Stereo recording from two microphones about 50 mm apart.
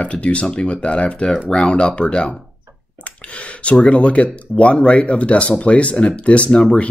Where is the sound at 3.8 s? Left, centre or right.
Left.